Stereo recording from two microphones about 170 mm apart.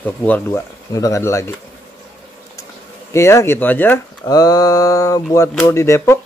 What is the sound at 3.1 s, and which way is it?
Speech, 15° left (ahead or behind).